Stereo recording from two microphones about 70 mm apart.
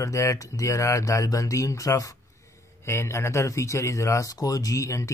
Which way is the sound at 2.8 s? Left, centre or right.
Left.